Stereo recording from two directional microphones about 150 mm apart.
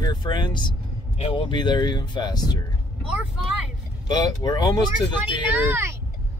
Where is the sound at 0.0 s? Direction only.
30° left (ahead or behind).